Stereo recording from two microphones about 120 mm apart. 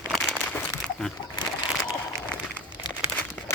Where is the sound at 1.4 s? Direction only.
45° left (ahead or behind).